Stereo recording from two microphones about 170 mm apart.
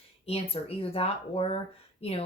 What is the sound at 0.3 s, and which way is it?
Speech, 35° left (ahead or behind).